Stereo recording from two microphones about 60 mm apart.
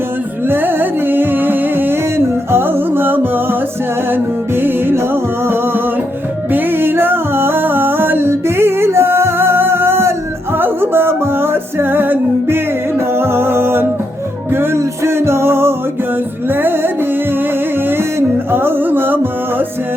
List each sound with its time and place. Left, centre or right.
0.4 s music: right